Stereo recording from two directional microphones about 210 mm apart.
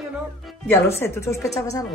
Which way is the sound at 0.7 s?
10° left (ahead or behind).